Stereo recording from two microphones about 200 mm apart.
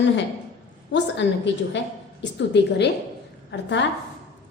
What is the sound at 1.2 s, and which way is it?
Speech, 60° left (ahead or behind).